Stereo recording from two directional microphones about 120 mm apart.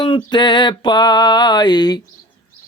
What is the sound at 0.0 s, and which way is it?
Mantra, 40° left (ahead or behind).